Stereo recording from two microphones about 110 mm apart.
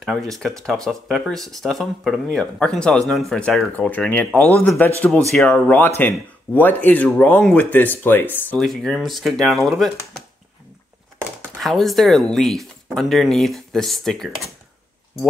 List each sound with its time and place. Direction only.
0.0 s speech: centre (ahead or behind)
8.5 s speech: 5° left (ahead or behind)
11.5 s speech: centre (ahead or behind)